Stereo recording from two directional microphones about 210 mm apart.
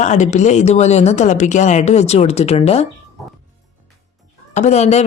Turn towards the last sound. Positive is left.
turn(degrees=30)  # may be behind; listen again after turning